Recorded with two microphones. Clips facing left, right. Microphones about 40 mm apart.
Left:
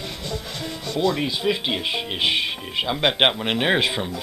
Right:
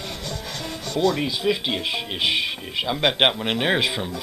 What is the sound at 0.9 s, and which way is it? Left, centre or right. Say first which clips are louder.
Speech: right 1 dB; left.